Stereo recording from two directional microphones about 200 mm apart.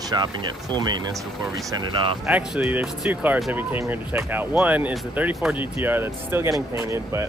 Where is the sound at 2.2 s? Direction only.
5° right (ahead or behind).